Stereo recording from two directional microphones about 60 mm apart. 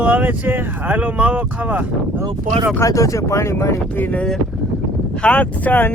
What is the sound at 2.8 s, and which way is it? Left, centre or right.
Speech, left.